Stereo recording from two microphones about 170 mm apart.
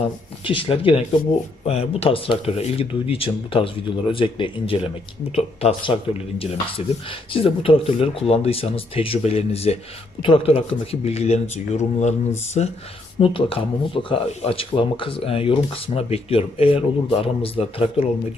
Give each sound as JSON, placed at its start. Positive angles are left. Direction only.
{"t": 0.4, "sound": "speech", "side_deg": 30}